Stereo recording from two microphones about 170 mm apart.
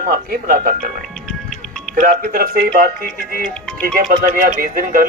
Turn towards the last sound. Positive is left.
turn(degrees=-55)  # may be behind; listen again after turning